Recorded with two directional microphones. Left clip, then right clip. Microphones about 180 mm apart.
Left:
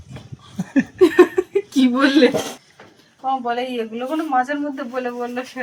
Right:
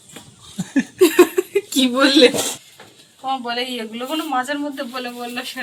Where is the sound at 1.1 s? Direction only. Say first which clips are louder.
Even; 25° left (ahead or behind).